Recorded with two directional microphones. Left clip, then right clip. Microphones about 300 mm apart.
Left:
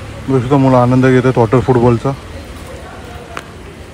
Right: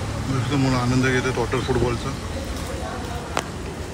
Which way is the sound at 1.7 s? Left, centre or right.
Left.